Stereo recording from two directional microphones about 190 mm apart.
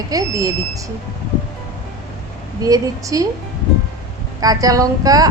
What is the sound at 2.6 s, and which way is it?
Speech, 20° right (ahead or behind).